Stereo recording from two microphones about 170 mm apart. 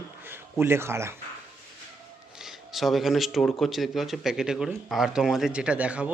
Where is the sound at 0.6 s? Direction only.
15° right (ahead or behind).